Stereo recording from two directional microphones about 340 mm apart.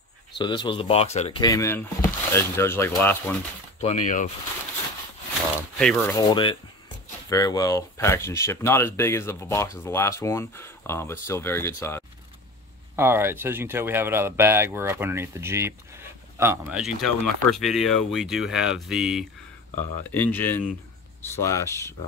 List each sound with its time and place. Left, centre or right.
0.4 s speech: centre
3.8 s speech: left
5.8 s speech: centre
12.9 s speech: centre